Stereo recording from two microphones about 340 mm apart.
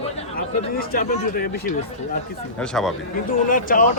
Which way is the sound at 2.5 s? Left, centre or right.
Centre.